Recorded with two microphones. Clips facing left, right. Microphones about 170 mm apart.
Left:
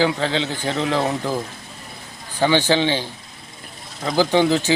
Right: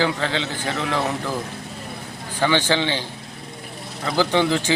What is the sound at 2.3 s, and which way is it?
A man's voice, 10° left (ahead or behind).